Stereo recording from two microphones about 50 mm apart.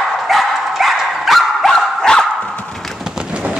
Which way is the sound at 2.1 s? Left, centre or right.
Centre.